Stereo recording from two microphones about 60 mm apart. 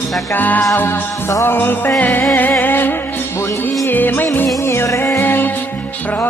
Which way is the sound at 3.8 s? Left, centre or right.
Left.